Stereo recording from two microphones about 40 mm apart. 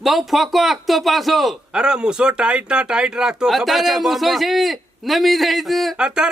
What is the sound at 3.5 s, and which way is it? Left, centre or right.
Speech, centre.